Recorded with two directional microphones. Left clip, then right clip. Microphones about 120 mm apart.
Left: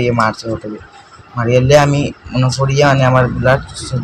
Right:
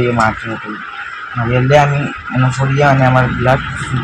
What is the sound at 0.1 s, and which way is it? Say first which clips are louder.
Speech: right 1 dB; 35° left (ahead or behind).